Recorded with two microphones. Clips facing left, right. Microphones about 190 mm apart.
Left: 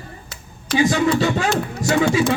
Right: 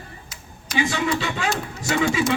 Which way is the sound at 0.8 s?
40° left (ahead or behind).